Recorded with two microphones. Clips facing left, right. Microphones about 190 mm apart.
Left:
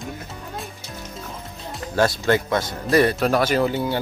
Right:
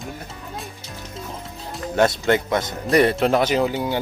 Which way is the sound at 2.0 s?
20° right (ahead or behind).